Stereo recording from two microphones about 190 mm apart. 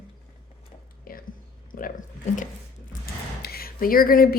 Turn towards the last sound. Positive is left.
turn(degrees=50)  # may be behind; listen again after turning